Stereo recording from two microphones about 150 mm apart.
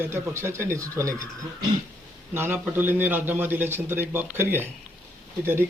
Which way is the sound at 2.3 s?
15° right (ahead or behind).